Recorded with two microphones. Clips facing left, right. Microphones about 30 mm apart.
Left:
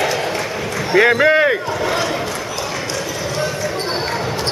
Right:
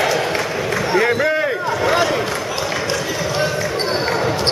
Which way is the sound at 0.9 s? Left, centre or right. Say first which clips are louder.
Left 6 dB; left.